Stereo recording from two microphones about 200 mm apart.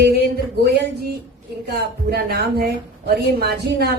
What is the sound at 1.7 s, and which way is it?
Speech, 50° right (ahead or behind).